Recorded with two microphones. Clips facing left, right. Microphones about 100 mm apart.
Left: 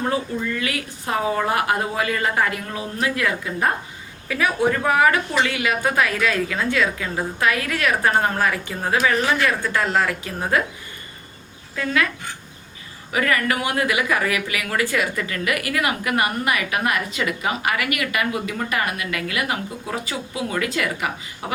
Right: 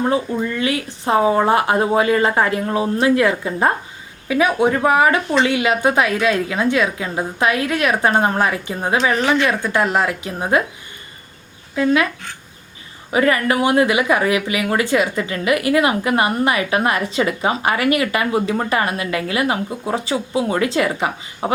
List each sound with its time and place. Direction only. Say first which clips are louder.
0.6 s speech: right 6 dB; 25° right (ahead or behind)
4.3 s speech: right 4 dB; 20° right (ahead or behind)
11.7 s speech: right 6 dB; 25° right (ahead or behind)
13.1 s speech: right 5 dB; 25° right (ahead or behind)